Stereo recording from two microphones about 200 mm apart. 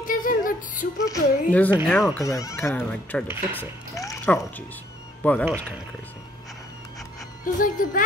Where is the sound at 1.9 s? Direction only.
Centre (ahead or behind).